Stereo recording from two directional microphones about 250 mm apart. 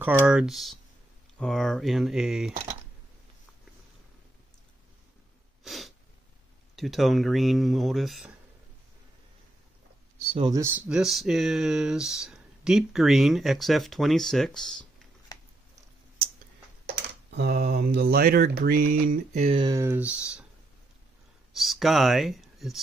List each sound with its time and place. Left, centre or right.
0.0 s speech: centre
5.6 s sneeze: centre
6.7 s speech: centre
10.3 s speech: centre
16.8 s speech: right; by 20.4 s centre
21.5 s speech: centre